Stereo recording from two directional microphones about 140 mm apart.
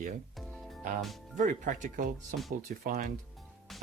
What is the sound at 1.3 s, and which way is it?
Speech, 65° right (ahead or behind).